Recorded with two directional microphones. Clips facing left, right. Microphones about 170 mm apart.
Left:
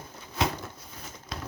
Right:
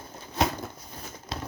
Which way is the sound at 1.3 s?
30° right (ahead or behind).